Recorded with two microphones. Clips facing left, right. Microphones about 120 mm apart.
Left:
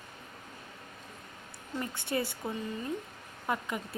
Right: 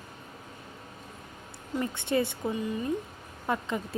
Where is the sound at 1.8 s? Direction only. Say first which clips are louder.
Right 5 dB; 25° right (ahead or behind).